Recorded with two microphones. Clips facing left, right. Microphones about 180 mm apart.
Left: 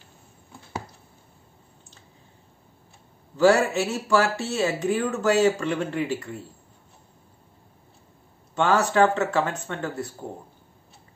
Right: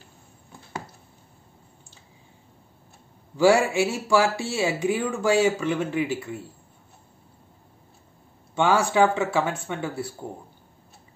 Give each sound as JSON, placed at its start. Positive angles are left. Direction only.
{"t": 3.3, "sound": "speech", "side_deg": -10}
{"t": 8.5, "sound": "speech", "side_deg": -10}